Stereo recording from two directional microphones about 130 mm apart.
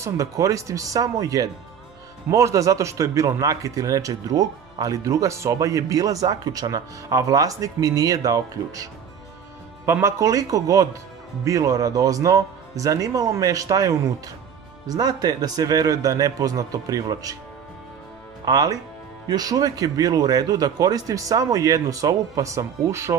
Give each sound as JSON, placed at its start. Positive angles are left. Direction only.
{"t": 0.0, "sound": "a man's voice", "side_deg": -25}
{"t": 9.8, "sound": "a man's voice", "side_deg": -20}
{"t": 18.4, "sound": "a man's voice", "side_deg": -30}